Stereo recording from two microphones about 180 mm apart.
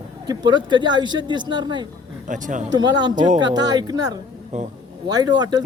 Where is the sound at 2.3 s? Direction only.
45° right (ahead or behind).